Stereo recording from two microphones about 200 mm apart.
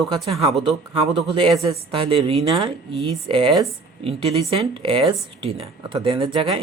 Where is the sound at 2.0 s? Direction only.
25° right (ahead or behind).